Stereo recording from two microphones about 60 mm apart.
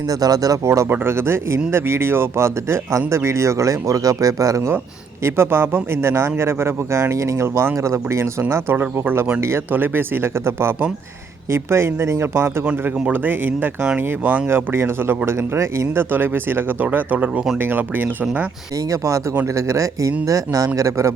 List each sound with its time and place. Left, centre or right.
0.1 s speech: right
0.9 s a man's voice: right
5.2 s a man's voice: right
8.7 s a man's voice: right
12.8 s speech: right
15.5 s a man's voice: right
16.1 s speech: right
16.8 s speech: right
18.9 s speech: right